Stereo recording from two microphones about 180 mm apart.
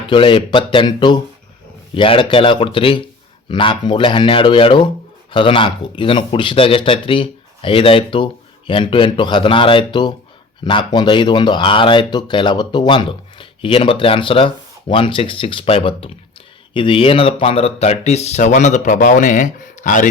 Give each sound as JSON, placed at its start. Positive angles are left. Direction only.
{"t": 0.1, "sound": "speech", "side_deg": 30}